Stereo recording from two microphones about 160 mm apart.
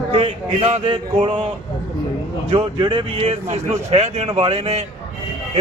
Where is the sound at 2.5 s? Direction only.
30° right (ahead or behind).